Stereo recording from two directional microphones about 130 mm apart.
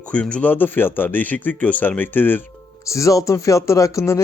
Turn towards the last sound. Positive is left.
turn(degrees=20)  # may be behind; listen again after turning